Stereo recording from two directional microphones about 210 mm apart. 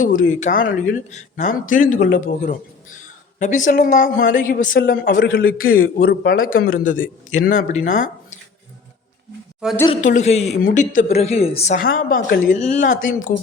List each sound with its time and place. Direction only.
0.0 s a man's voice: 40° left (ahead or behind)
9.6 s a woman's voice: 5° right (ahead or behind)
10.0 s speech: 35° left (ahead or behind)